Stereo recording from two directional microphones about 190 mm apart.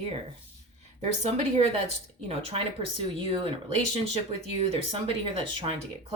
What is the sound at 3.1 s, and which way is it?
Speech, 25° right (ahead or behind).